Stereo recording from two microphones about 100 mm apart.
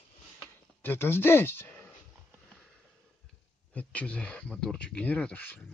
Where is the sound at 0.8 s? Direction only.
25° left (ahead or behind).